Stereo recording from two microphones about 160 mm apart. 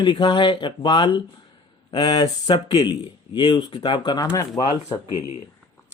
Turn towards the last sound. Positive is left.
turn(degrees=20)  # may be behind; listen again after turning